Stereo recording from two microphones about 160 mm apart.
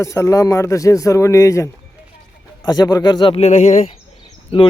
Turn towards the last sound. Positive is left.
turn(degrees=40)  # may be behind; listen again after turning